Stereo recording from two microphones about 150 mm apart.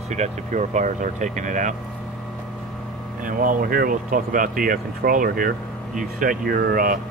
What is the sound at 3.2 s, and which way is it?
Speech, 65° right (ahead or behind).